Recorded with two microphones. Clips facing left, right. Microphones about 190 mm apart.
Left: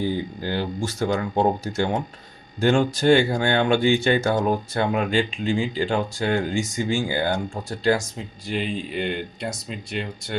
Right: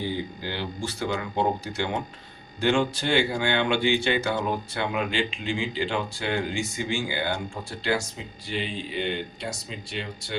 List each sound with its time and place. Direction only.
0.1 s speech: 45° left (ahead or behind)